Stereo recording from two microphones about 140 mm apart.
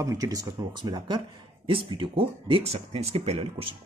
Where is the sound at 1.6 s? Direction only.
40° right (ahead or behind).